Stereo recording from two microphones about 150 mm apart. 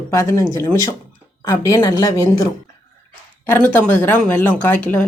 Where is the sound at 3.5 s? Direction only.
15° left (ahead or behind).